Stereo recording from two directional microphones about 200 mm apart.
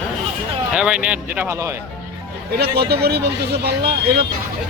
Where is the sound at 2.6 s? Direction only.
55° right (ahead or behind).